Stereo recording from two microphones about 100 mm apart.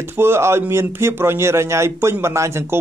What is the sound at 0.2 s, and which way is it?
A man's voice, 25° right (ahead or behind).